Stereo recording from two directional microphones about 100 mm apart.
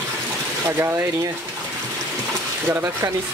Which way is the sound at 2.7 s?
25° right (ahead or behind).